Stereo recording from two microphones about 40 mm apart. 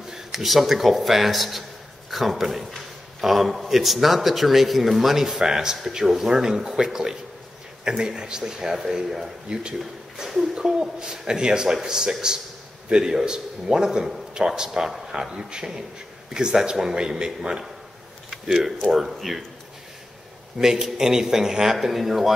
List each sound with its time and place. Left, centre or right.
0.1 s a man's voice: centre
9.5 s speech: right
10.1 s a man's voice: centre
14.0 s a sound: centre
14.4 s a man's voice: centre
18.9 s a man's voice: centre
20.5 s a man's voice: centre
21.7 s a man's voice: centre